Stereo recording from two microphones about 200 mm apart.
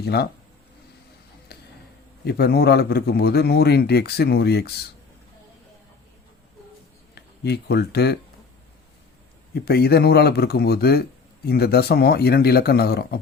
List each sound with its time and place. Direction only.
0.0 s a man's voice: 50° left (ahead or behind)
1.5 s a sound: 55° left (ahead or behind)
2.2 s a man's voice: 55° left (ahead or behind)
7.2 s speech: 55° left (ahead or behind)
9.6 s a man's voice: 55° left (ahead or behind)